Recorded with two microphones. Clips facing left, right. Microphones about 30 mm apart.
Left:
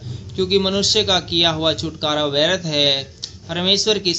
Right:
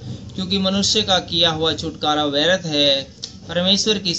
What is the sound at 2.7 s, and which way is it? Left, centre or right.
Speech, left.